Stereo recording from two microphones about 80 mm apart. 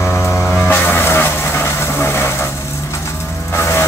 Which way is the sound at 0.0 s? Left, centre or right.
Left.